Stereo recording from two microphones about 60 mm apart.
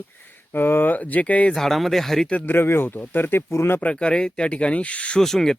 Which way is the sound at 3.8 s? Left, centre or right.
Centre.